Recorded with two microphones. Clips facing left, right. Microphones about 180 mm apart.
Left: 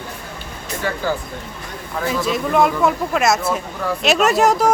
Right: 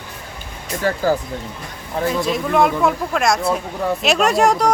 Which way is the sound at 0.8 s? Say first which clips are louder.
Right 4 dB; 40° right (ahead or behind).